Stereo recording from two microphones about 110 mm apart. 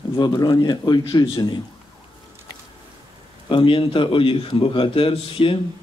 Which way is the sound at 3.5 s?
50° left (ahead or behind).